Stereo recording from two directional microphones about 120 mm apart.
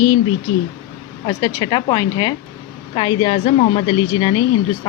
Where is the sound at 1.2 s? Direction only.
35° left (ahead or behind).